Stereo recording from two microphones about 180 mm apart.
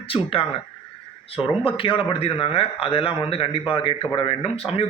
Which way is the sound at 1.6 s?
30° left (ahead or behind).